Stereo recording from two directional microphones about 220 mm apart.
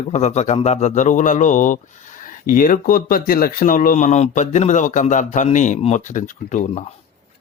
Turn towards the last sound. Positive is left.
turn(degrees=35)  # may be behind; listen again after turning